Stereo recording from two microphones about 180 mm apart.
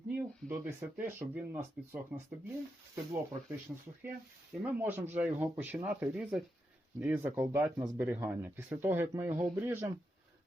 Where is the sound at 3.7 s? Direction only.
10° right (ahead or behind).